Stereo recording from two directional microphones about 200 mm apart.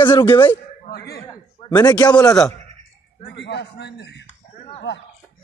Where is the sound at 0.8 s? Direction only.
55° left (ahead or behind).